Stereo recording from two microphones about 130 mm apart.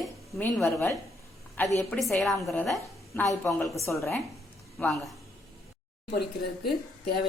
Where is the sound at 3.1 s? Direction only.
15° left (ahead or behind).